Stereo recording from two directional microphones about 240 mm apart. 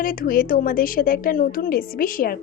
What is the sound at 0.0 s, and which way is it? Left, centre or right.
A woman's voice, left.